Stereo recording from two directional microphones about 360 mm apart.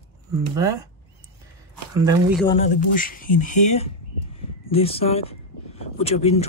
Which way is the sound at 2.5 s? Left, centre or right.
Left.